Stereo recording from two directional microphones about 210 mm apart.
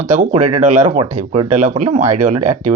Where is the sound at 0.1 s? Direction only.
35° right (ahead or behind).